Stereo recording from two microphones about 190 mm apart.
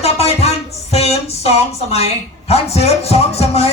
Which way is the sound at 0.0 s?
35° left (ahead or behind).